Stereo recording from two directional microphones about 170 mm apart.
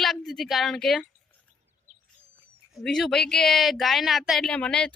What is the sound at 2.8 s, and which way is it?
Speech, 5° left (ahead or behind).